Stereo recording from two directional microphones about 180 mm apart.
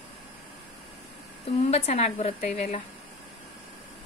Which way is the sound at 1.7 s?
35° left (ahead or behind).